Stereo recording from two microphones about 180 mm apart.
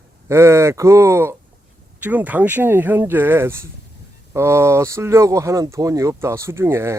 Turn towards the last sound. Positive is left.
turn(degrees=-15)  # may be behind; listen again after turning